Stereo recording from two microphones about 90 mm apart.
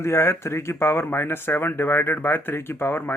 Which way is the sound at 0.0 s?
30° left (ahead or behind).